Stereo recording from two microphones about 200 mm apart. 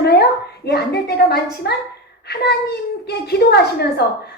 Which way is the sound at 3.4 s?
55° left (ahead or behind).